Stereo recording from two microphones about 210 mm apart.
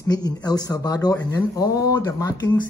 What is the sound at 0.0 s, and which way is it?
Speech, 20° left (ahead or behind).